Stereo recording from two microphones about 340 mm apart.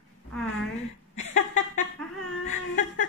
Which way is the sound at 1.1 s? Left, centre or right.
Centre.